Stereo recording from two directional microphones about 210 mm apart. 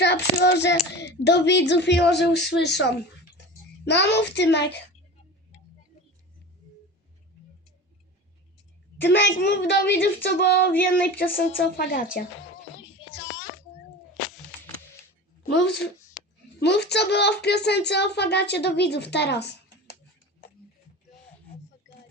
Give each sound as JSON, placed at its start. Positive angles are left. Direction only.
{"t": 0.0, "sound": "child singing", "side_deg": 50}
{"t": 3.8, "sound": "speech", "side_deg": 55}
{"t": 9.0, "sound": "speech", "side_deg": 55}
{"t": 13.1, "sound": "a sound", "side_deg": 60}
{"t": 15.4, "sound": "speech", "side_deg": 50}